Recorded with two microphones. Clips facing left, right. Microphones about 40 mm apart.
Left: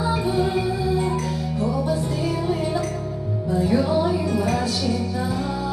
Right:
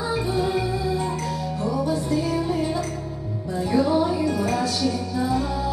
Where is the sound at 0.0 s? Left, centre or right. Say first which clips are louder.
Left 2 dB; centre.